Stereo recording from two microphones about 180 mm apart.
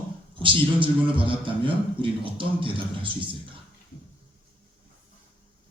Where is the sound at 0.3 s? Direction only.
30° right (ahead or behind).